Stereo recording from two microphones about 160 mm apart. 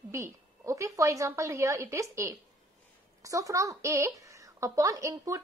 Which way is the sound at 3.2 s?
20° right (ahead or behind).